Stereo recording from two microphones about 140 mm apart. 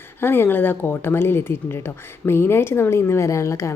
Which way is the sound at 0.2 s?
15° left (ahead or behind).